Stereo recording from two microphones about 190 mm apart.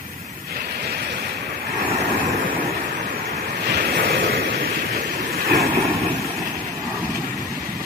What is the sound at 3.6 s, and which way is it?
Vehicle, 55° right (ahead or behind).